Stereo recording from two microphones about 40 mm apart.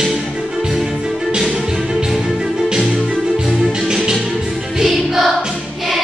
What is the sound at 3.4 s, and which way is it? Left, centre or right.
Music, centre.